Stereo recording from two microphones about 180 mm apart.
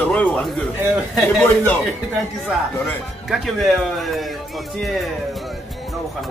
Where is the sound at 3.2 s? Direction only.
Centre (ahead or behind).